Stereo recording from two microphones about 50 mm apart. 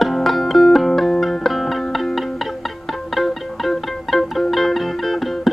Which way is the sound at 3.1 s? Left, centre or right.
Centre.